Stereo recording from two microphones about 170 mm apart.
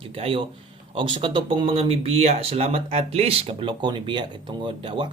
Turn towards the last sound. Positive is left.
turn(degrees=-30)  # may be behind; listen again after turning